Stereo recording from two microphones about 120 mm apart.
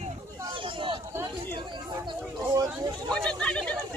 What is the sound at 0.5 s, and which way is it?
Speech, 45° right (ahead or behind).